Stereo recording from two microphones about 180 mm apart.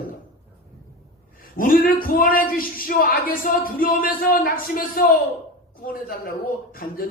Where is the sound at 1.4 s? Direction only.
50° left (ahead or behind).